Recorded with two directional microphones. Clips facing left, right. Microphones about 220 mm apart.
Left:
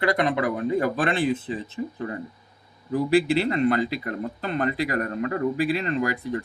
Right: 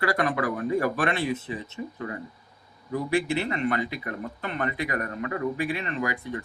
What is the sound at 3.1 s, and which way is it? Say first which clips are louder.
Speech: left 5 dB; 35° left (ahead or behind).